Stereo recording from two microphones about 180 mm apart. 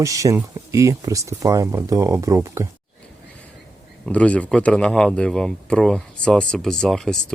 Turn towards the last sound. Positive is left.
turn(degrees=0)  # may be behind; listen again after turning